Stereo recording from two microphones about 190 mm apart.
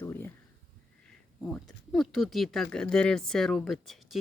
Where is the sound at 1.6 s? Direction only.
Centre (ahead or behind).